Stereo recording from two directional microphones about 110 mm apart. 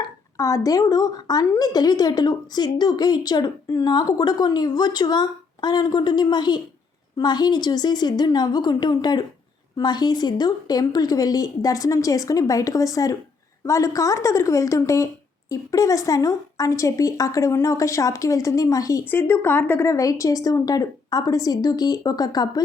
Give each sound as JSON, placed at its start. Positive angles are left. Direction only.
{"t": 0.3, "sound": "a woman's voice", "side_deg": 30}
{"t": 19.0, "sound": "a woman's voice", "side_deg": 20}